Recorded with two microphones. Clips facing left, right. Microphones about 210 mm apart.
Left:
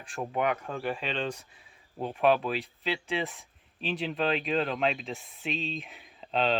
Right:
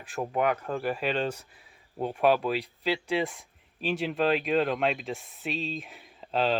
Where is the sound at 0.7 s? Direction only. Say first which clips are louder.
Right 4 dB; 40° right (ahead or behind).